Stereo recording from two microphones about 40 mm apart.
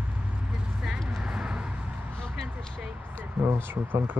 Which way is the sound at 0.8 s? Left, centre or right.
Right.